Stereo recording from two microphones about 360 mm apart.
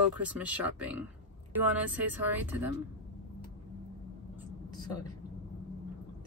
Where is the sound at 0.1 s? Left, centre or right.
Centre.